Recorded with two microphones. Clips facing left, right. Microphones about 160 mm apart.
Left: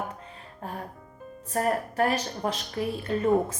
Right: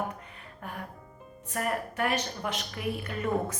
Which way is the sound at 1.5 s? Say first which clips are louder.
Left 5 dB; 35° left (ahead or behind).